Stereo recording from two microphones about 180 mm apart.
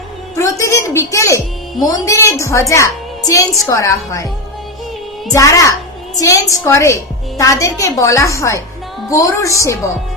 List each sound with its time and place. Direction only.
0.3 s a sound: 15° left (ahead or behind)
1.8 s a woman's voice: 20° left (ahead or behind)
5.3 s a woman's voice: 15° left (ahead or behind)